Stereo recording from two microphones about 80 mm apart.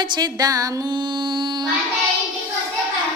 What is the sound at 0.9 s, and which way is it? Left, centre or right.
Mantra, right.